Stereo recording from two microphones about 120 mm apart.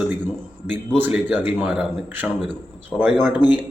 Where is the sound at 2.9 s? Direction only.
5° left (ahead or behind).